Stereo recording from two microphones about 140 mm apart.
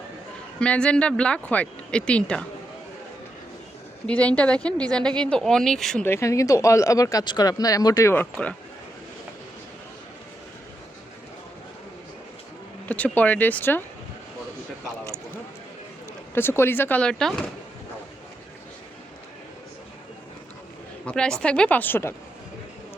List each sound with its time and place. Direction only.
0.6 s speech: 10° left (ahead or behind)
4.0 s speech: 10° left (ahead or behind)
6.1 s speech: 20° left (ahead or behind)
8.1 s speech: 10° left (ahead or behind)
12.9 s speech: 10° left (ahead or behind)
16.3 s speech: 15° left (ahead or behind)
21.1 s speech: 5° left (ahead or behind)